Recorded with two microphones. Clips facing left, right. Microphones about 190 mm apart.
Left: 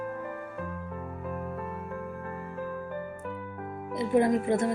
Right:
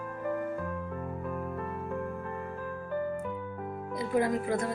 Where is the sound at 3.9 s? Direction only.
25° left (ahead or behind).